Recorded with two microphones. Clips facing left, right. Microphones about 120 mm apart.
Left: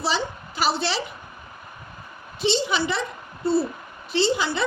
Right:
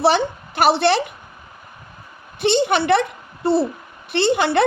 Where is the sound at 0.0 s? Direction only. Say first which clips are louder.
Right 9 dB; 60° right (ahead or behind).